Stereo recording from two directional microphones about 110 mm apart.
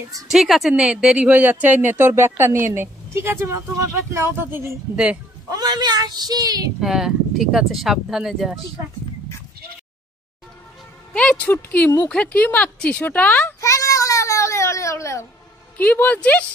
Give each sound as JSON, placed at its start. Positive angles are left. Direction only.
{"t": 0.3, "sound": "speech", "side_deg": 0}
{"t": 5.5, "sound": "speech", "side_deg": -40}
{"t": 6.8, "sound": "speech", "side_deg": -5}
{"t": 11.1, "sound": "speech", "side_deg": 10}
{"t": 13.6, "sound": "baby cry", "side_deg": 30}
{"t": 15.8, "sound": "speech", "side_deg": 15}